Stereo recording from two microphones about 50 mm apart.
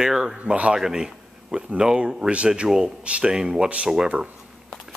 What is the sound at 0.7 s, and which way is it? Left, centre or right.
Speech, centre.